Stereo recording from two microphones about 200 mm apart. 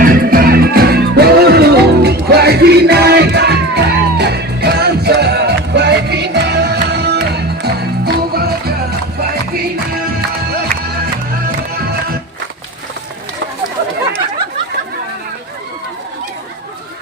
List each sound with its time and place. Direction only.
0.0 s music: 45° right (ahead or behind)